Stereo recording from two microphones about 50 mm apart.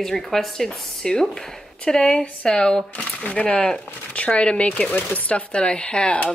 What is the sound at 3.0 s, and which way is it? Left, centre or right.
Speech, left.